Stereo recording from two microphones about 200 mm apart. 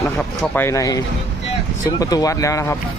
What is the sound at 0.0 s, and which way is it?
Speech, 5° left (ahead or behind).